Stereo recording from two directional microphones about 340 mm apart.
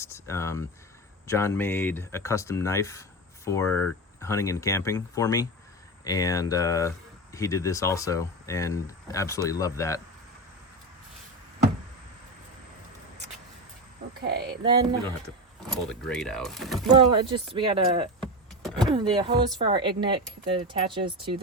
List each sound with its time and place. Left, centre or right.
0.0 s speech: centre
14.2 s speech: right
15.7 s speech: centre
16.9 s speech: centre
18.2 s vehicle: centre
18.9 s speech: centre